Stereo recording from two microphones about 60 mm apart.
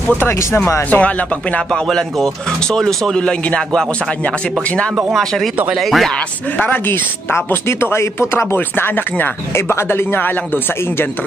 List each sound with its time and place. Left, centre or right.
0.3 s speech: left
0.8 s speech: left
1.7 s speech: centre
3.2 s speech: centre
5.1 s speech: centre
6.5 s speech: left
6.9 s speech: left
8.5 s a man's voice: left
9.5 s a man's voice: left